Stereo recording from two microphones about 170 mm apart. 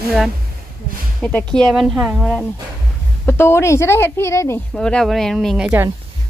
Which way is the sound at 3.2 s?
15° left (ahead or behind).